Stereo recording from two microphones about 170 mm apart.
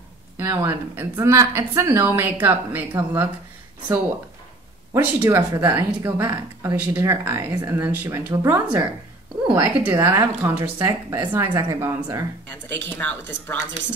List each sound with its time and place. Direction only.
0.4 s speech: 15° right (ahead or behind)
4.9 s speech: 15° right (ahead or behind)
6.1 s speech: 15° right (ahead or behind)
8.0 s speech: 10° right (ahead or behind)
12.4 s speech: 10° left (ahead or behind)